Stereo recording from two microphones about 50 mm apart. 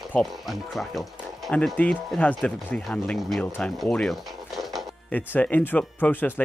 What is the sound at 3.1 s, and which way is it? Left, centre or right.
Speech, centre.